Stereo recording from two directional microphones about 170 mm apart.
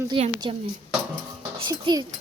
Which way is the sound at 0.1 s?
30° right (ahead or behind).